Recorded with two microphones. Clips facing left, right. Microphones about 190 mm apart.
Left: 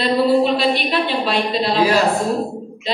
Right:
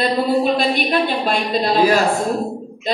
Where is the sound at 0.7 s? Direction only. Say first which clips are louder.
Right 1 dB; 45° right (ahead or behind).